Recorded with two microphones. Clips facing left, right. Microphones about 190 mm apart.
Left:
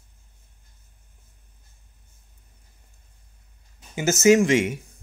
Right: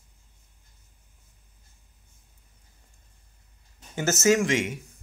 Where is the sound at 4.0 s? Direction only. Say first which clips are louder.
Left 5 dB; 10° left (ahead or behind).